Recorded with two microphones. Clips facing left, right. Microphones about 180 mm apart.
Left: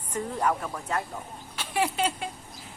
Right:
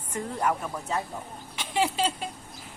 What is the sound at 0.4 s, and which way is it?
Speech, 5° right (ahead or behind).